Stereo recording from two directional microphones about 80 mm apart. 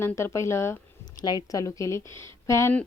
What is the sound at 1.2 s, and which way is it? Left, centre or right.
A woman's voice, left.